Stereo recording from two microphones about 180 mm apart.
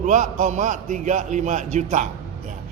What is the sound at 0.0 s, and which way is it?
A man's voice, 45° right (ahead or behind).